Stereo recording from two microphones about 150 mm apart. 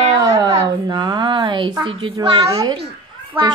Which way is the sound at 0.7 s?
30° right (ahead or behind).